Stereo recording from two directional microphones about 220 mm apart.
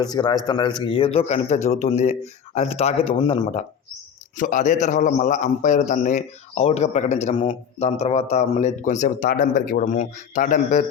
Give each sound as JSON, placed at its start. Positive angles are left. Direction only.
{"t": 0.0, "sound": "a man's voice", "side_deg": 20}
{"t": 4.4, "sound": "a man's voice", "side_deg": 35}